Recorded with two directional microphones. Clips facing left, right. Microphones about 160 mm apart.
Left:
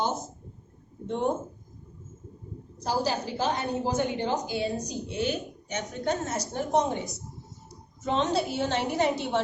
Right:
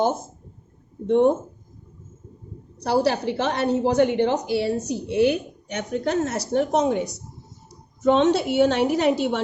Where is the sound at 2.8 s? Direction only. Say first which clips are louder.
Right 7 dB; 70° right (ahead or behind).